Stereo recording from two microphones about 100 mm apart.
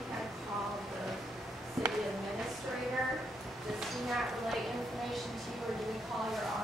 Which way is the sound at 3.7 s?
5° right (ahead or behind).